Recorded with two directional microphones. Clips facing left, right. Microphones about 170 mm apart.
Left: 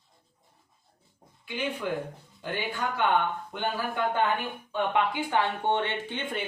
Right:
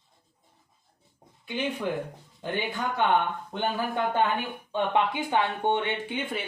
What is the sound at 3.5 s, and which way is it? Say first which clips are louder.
Speech: right 2 dB; 25° right (ahead or behind).